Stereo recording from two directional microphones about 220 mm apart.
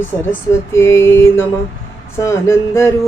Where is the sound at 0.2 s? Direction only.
10° left (ahead or behind).